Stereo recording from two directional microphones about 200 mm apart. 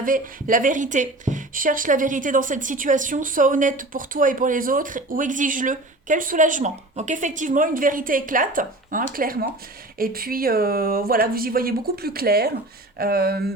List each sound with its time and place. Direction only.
0.0 s speech: 45° right (ahead or behind)